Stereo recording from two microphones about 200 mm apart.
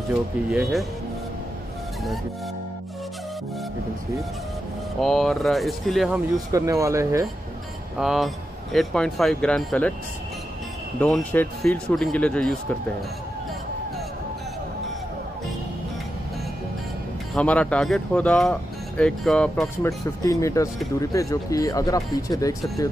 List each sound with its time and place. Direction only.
0.5 s speech: centre (ahead or behind)
5.0 s speech: centre (ahead or behind)
6.3 s speech: 15° right (ahead or behind)
8.0 s speech: centre (ahead or behind)
11.0 s speech: 5° left (ahead or behind)
17.3 s speech: 5° left (ahead or behind)
20.2 s speech: 15° left (ahead or behind)